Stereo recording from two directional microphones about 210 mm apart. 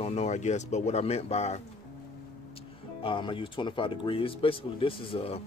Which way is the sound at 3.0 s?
25° left (ahead or behind).